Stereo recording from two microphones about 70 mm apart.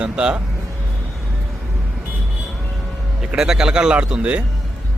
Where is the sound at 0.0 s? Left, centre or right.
Centre.